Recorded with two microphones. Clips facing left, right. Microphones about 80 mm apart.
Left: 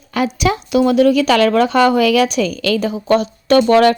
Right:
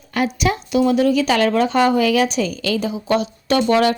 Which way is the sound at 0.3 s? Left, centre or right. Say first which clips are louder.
Left 4 dB; left.